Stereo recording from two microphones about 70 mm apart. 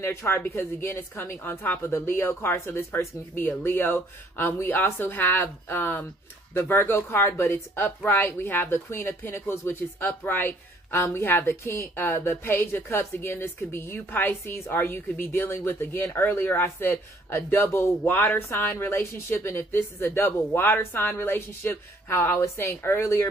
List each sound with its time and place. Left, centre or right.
0.0 s a woman's voice: left
16.6 s a woman's voice: left